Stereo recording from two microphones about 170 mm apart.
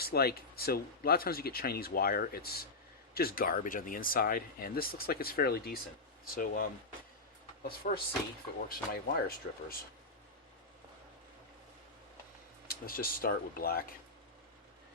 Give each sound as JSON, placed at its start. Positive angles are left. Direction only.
{"t": 0.0, "sound": "speech", "side_deg": 65}
{"t": 12.6, "sound": "speech", "side_deg": 60}